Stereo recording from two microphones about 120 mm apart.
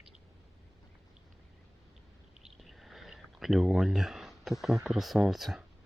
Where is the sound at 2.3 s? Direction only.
Centre (ahead or behind).